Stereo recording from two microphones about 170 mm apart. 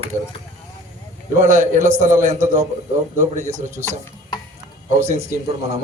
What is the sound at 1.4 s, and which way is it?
A man's voice, 50° right (ahead or behind).